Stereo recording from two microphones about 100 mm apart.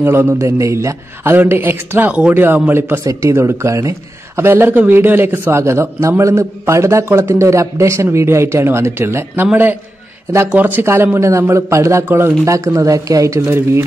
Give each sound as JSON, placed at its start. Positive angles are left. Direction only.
{"t": 0.0, "sound": "a man's voice", "side_deg": -25}
{"t": 3.1, "sound": "a man's voice", "side_deg": -30}
{"t": 12.4, "sound": "speech", "side_deg": -30}